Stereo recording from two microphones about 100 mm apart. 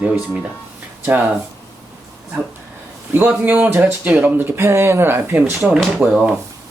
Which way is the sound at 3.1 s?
20° right (ahead or behind).